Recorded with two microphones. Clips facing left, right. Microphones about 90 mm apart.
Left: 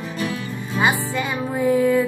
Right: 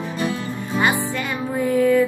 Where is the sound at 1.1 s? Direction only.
15° left (ahead or behind).